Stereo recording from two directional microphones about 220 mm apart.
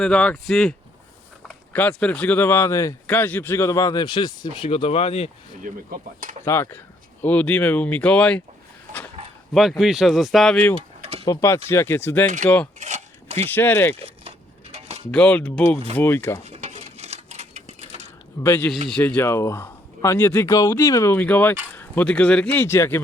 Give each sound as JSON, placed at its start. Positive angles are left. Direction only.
{"t": 0.0, "sound": "speech", "side_deg": 5}
{"t": 5.6, "sound": "speech", "side_deg": -40}
{"t": 6.4, "sound": "speech", "side_deg": 10}
{"t": 9.5, "sound": "speech", "side_deg": 0}
{"t": 10.8, "sound": "a sound", "side_deg": -25}
{"t": 11.3, "sound": "speech", "side_deg": 15}
{"t": 12.4, "sound": "speech", "side_deg": -35}
{"t": 12.8, "sound": "a sound", "side_deg": -30}
{"t": 13.5, "sound": "speech", "side_deg": 10}
{"t": 13.9, "sound": "a sound", "side_deg": -30}
{"t": 15.1, "sound": "speech", "side_deg": 5}
{"t": 16.4, "sound": "a sound", "side_deg": -30}
{"t": 18.4, "sound": "speech", "side_deg": 10}